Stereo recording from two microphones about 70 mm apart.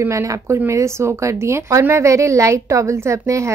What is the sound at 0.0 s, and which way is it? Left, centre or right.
A woman's voice, right.